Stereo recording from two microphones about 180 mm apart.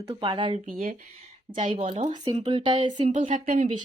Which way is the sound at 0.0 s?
30° right (ahead or behind).